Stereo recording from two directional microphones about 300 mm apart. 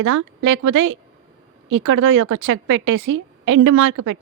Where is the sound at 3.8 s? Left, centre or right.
Right.